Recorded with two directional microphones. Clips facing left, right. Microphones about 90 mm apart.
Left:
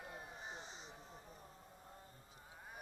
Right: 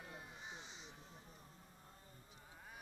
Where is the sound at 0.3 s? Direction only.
40° left (ahead or behind).